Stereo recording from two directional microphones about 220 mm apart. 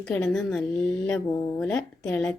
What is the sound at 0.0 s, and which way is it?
Speech, 5° left (ahead or behind).